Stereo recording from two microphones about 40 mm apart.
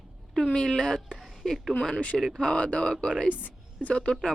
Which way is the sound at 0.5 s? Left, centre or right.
Centre.